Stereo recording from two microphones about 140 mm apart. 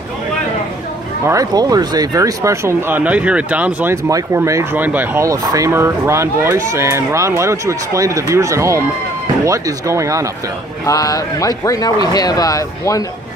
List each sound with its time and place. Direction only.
1.2 s speech: 25° right (ahead or behind)
3.9 s speech: 20° right (ahead or behind)
10.9 s speech: 25° left (ahead or behind)